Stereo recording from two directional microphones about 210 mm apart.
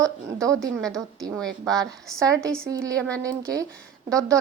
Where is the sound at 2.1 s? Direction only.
15° right (ahead or behind).